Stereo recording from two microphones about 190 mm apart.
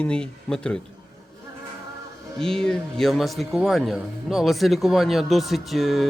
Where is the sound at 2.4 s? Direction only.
5° left (ahead or behind).